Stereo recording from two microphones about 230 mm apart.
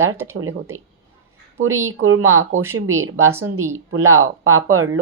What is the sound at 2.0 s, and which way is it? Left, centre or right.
Speech, right.